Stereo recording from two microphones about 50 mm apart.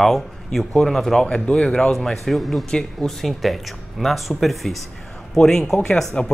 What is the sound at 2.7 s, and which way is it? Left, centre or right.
Speech, centre.